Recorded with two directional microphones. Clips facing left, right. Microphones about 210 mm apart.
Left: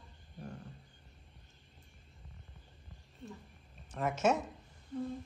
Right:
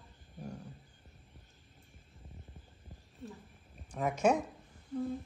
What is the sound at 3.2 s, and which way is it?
A woman's voice, 5° right (ahead or behind).